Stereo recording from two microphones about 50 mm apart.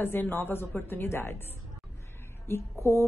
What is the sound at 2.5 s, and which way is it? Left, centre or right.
Speech, left.